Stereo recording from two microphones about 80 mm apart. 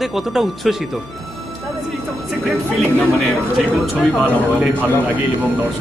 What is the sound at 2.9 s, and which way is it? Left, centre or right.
Speech, centre.